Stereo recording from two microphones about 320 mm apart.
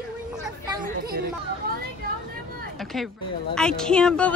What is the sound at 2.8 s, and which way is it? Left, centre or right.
Speech, centre.